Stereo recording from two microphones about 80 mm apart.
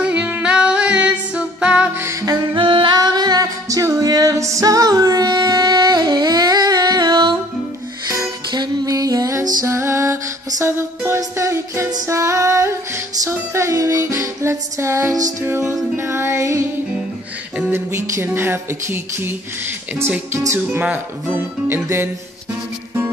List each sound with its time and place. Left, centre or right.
0.0 s music: centre
2.0 s music: right
2.5 s singing: right
3.0 s music: right
8.5 s music: right
9.7 s music: right
17.7 s music: right
21.8 s music: right